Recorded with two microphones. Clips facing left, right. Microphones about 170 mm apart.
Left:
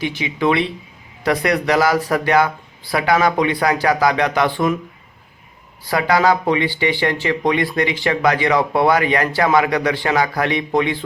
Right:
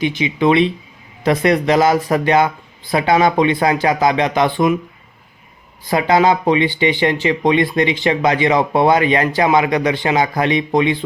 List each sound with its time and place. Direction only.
0.0 s speech: 20° right (ahead or behind)
5.8 s speech: 20° right (ahead or behind)